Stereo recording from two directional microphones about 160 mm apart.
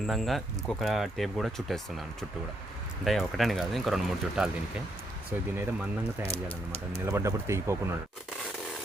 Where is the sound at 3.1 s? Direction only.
Centre (ahead or behind); by 7.8 s 15° right (ahead or behind).